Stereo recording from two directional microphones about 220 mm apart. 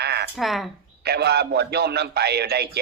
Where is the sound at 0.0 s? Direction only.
50° right (ahead or behind).